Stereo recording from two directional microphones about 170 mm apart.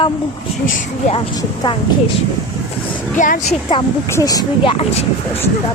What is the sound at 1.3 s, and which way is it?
Speech, 25° left (ahead or behind).